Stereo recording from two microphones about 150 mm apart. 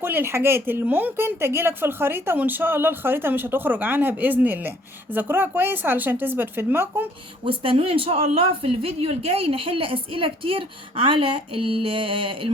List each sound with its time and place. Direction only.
0.0 s a woman's voice: 15° right (ahead or behind)
7.4 s speech: 35° right (ahead or behind)